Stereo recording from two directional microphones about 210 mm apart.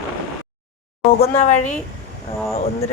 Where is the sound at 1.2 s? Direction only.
35° left (ahead or behind).